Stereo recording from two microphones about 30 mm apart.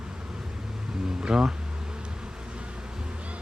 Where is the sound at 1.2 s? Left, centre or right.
Right.